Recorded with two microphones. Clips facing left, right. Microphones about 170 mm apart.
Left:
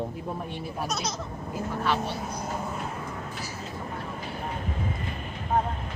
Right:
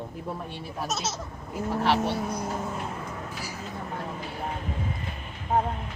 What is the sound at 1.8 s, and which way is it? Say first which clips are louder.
Speech: right 4 dB; 70° right (ahead or behind).